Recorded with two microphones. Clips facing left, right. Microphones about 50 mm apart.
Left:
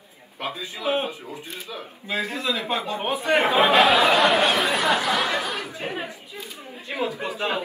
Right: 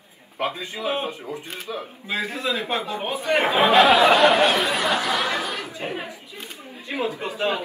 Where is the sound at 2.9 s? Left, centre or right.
Left.